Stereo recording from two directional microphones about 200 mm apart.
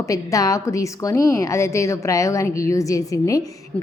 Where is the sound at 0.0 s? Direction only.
15° left (ahead or behind).